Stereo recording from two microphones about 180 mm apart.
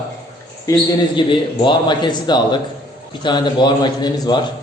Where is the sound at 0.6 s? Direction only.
25° left (ahead or behind).